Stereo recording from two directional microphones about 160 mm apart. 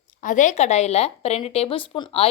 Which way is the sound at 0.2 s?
50° left (ahead or behind).